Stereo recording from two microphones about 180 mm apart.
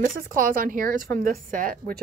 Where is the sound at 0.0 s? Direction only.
50° right (ahead or behind).